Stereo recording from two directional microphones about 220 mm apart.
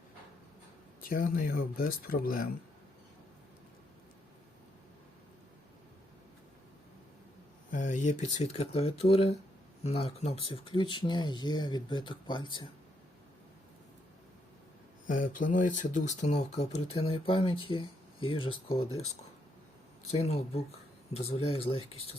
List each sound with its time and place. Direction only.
1.0 s speech: 40° left (ahead or behind)
7.7 s speech: 35° left (ahead or behind)
15.0 s speech: 40° left (ahead or behind)
20.1 s speech: 30° left (ahead or behind)